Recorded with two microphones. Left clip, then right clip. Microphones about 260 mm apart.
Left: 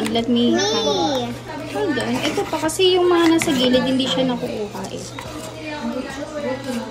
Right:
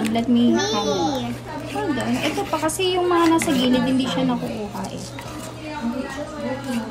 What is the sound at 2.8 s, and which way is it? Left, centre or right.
A child's voice, right.